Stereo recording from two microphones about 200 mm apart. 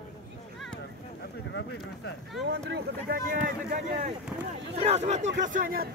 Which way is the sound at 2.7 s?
50° right (ahead or behind).